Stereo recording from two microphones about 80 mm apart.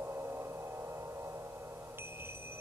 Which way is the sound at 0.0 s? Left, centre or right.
Right.